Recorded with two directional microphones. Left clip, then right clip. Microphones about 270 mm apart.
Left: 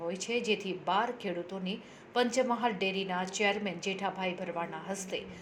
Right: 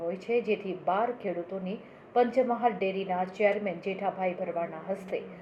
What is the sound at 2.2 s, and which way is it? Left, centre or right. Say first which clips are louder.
A woman's voice: right 4 dB; left.